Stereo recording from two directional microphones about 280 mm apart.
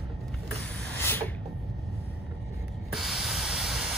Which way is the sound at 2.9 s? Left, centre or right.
Centre.